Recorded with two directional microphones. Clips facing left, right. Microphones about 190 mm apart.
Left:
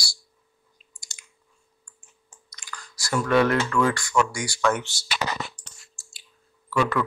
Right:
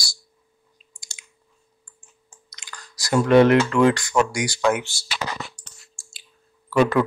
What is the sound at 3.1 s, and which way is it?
Speech, 25° right (ahead or behind).